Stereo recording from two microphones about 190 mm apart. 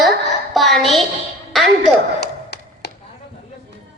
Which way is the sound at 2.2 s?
60° left (ahead or behind).